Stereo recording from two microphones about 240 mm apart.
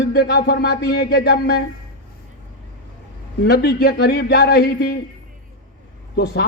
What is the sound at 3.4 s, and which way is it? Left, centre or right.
A man's voice, left.